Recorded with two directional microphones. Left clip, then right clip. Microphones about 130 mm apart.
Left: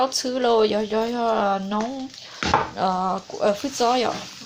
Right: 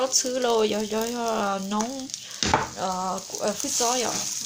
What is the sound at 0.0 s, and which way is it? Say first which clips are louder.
Speech: left 2 dB; 5° left (ahead or behind).